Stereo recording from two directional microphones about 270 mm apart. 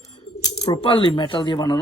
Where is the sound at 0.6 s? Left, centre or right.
Centre.